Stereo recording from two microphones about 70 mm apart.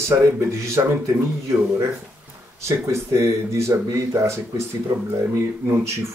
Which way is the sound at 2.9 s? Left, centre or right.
Right.